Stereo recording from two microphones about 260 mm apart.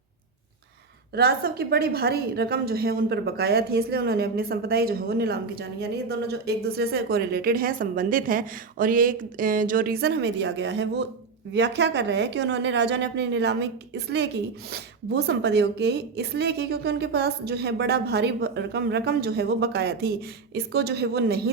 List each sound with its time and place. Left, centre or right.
1.1 s a woman's voice: right